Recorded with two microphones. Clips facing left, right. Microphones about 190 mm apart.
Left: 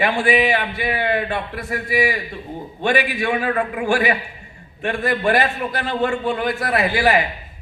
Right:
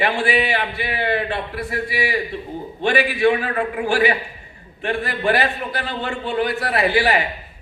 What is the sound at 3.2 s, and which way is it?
A man's voice, 45° left (ahead or behind).